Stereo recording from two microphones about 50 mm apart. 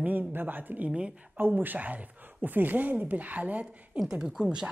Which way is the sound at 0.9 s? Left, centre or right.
Right.